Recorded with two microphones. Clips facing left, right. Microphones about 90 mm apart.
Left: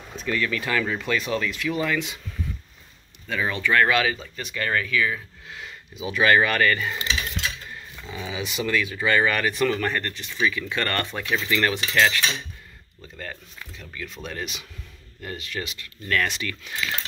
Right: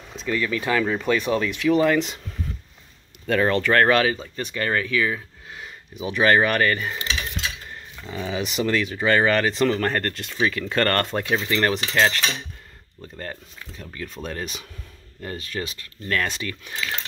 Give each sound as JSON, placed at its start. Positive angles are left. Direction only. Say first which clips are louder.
{"t": 0.1, "sound": "speech", "louder": "right 1 dB", "side_deg": -20}
{"t": 1.7, "sound": "speech", "louder": "right 8 dB", "side_deg": -45}
{"t": 3.3, "sound": "speech", "louder": "right 5 dB", "side_deg": -55}
{"t": 8.1, "sound": "speech", "louder": "right 4 dB", "side_deg": -40}
{"t": 11.2, "sound": "speech", "louder": "left 2 dB", "side_deg": -30}
{"t": 13.2, "sound": "speech", "louder": "right 2 dB", "side_deg": -35}